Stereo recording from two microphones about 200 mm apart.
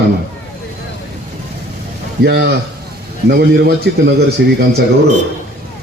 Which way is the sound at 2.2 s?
55° right (ahead or behind).